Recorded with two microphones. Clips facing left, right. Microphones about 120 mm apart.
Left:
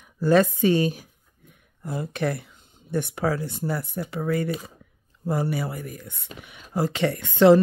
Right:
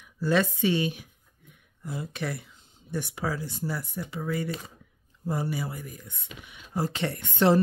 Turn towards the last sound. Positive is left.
turn(degrees=90)